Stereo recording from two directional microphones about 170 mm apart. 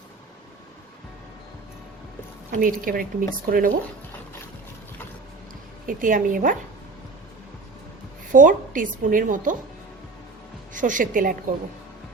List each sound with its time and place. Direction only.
2.5 s speech: 55° right (ahead or behind)
5.8 s a woman's voice: 55° right (ahead or behind)
8.3 s a woman's voice: 50° right (ahead or behind)
10.8 s a woman's voice: 50° right (ahead or behind)